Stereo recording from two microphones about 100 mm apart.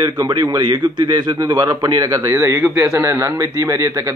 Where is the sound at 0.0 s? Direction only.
40° right (ahead or behind).